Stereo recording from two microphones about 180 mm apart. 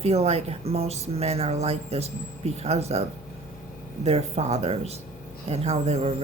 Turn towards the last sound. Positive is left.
turn(degrees=-35)  # may be behind; listen again after turning